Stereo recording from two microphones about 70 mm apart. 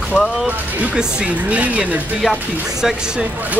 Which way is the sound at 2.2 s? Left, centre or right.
Centre.